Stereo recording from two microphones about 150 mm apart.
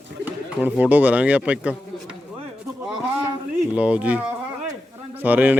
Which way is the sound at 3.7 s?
10° right (ahead or behind).